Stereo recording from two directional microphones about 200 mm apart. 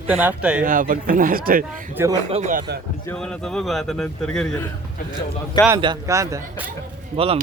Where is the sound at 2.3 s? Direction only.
30° right (ahead or behind).